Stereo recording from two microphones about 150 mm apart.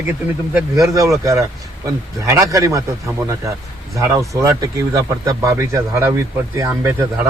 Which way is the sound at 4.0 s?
20° right (ahead or behind).